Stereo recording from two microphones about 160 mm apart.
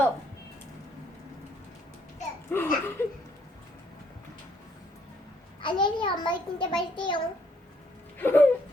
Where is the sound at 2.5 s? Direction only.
15° left (ahead or behind).